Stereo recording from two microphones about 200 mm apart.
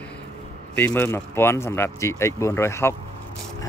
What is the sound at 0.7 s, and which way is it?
Speech, 10° left (ahead or behind).